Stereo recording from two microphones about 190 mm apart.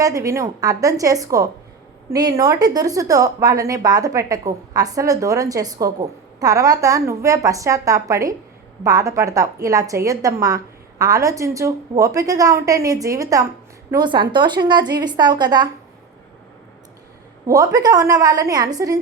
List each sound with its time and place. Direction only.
0.0 s a woman's voice: 15° right (ahead or behind)
17.4 s a woman's voice: 15° right (ahead or behind)